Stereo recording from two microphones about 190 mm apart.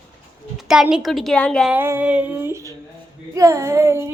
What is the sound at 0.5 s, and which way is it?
A woman's voice, centre (ahead or behind).